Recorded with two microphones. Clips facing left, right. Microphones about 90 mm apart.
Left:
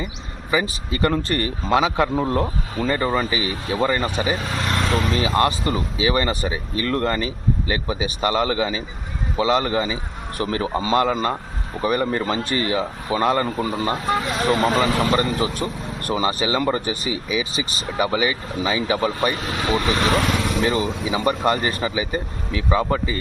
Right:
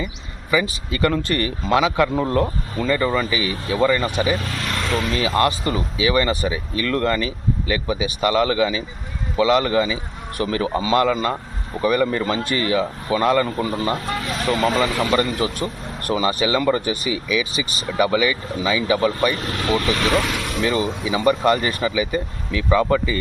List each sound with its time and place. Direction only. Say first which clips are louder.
0.5 s a man's voice: right 1 dB; 30° left (ahead or behind)
14.9 s speech: even; 30° left (ahead or behind)
19.5 s speech: even; 10° left (ahead or behind)
19.7 s speech: right 1 dB; 25° left (ahead or behind)